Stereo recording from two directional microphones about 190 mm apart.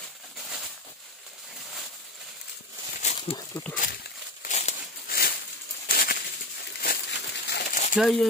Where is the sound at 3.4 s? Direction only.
10° left (ahead or behind).